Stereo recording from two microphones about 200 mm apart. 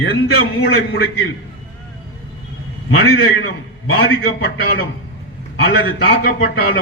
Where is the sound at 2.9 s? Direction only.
85° left.